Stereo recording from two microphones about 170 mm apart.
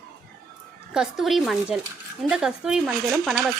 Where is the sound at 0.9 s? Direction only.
5° right (ahead or behind).